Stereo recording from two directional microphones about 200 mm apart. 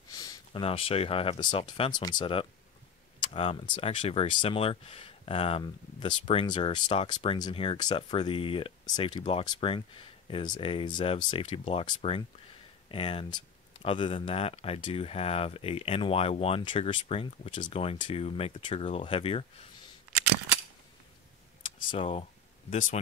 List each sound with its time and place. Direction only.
0.1 s speech: 20° left (ahead or behind)
21.8 s speech: 25° left (ahead or behind)
22.7 s speech: 40° left (ahead or behind)